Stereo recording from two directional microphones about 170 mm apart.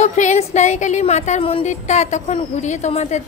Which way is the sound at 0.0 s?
45° left (ahead or behind).